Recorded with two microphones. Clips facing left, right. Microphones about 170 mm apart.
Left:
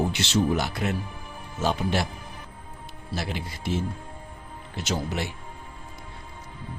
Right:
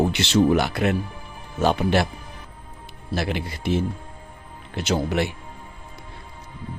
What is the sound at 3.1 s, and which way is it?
Speech, 65° right (ahead or behind).